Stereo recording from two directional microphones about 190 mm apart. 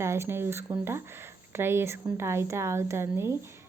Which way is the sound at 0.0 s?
15° right (ahead or behind).